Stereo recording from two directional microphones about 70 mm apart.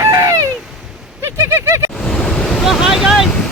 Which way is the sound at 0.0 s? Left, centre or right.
Right.